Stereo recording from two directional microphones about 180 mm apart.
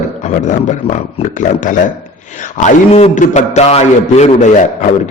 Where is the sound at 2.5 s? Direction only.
40° left (ahead or behind).